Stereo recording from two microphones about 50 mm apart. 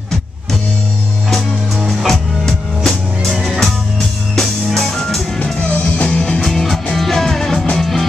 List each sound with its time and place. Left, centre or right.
1.9 s music: centre
5.4 s music: left
6.4 s music: centre